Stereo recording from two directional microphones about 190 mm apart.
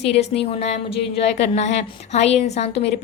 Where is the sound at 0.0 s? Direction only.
35° left (ahead or behind).